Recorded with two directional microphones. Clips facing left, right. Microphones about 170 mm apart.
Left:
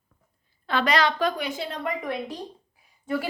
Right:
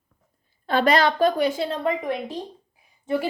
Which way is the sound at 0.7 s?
45° right (ahead or behind).